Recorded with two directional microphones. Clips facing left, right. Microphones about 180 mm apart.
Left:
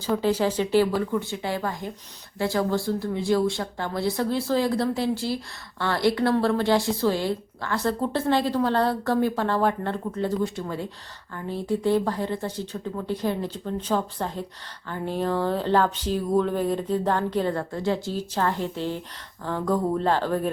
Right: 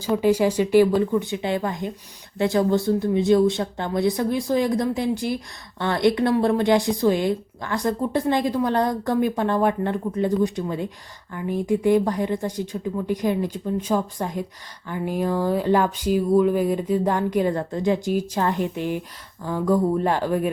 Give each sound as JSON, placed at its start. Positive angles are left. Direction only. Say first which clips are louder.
{"t": 0.2, "sound": "speech", "louder": "right 4 dB", "side_deg": -10}